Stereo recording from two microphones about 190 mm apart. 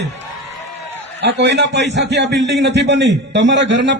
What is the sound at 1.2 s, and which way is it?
A man's voice, 65° right (ahead or behind).